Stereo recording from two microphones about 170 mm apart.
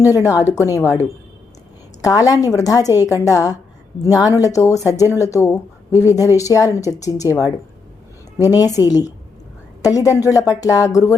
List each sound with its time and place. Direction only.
0.0 s a woman's voice: 20° left (ahead or behind)
2.0 s a woman's voice: 20° left (ahead or behind)
8.5 s a woman's voice: 20° left (ahead or behind)